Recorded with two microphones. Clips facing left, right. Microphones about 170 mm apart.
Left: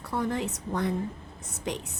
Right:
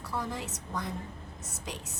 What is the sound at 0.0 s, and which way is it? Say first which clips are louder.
Speech: left 6 dB; 60° left (ahead or behind).